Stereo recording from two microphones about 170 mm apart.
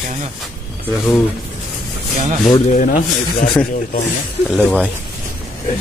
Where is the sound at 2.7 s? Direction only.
45° left (ahead or behind).